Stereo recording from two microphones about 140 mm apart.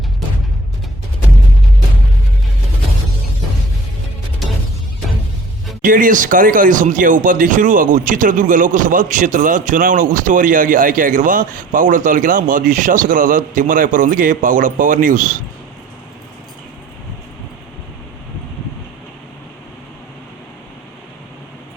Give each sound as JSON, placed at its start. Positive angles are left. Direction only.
{"t": 5.8, "sound": "speech", "side_deg": -75}